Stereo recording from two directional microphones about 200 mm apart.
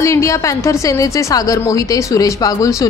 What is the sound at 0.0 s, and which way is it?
A woman's voice, 15° left (ahead or behind).